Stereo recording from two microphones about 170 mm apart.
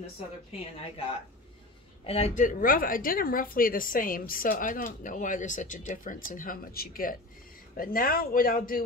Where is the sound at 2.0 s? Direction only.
35° left (ahead or behind).